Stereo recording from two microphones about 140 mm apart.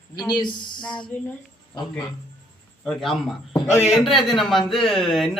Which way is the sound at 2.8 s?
Centre (ahead or behind).